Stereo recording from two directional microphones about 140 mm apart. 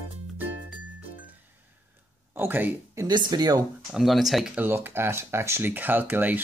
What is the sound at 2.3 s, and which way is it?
Speech, 15° right (ahead or behind).